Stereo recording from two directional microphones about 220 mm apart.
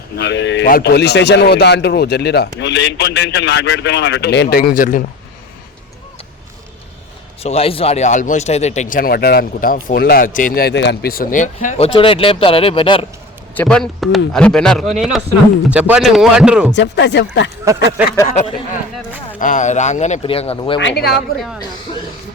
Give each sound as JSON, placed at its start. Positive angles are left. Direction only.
{"t": 0.2, "sound": "a man's voice", "side_deg": 55}
{"t": 7.4, "sound": "speech", "side_deg": 25}
{"t": 13.5, "sound": "a man's voice", "side_deg": 5}
{"t": 16.7, "sound": "a man's voice", "side_deg": 50}
{"t": 17.7, "sound": "speech", "side_deg": -5}
{"t": 18.3, "sound": "speech", "side_deg": 30}
{"t": 20.7, "sound": "a man's voice", "side_deg": 50}